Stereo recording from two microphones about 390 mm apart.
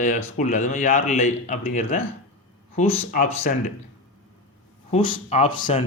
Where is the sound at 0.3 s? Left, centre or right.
Centre.